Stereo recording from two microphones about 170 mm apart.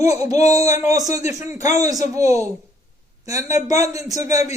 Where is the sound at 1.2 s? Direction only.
45° left (ahead or behind).